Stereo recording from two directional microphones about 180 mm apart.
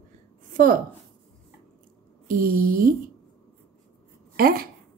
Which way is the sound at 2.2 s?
50° right (ahead or behind).